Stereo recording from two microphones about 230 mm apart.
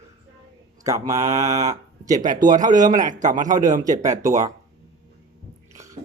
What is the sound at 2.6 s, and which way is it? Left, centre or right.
A man's voice, right.